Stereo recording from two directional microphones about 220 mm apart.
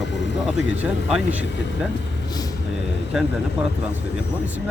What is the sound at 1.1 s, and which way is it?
Speech, 5° right (ahead or behind).